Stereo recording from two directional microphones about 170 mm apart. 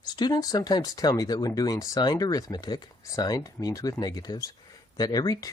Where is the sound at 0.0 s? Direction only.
25° left (ahead or behind).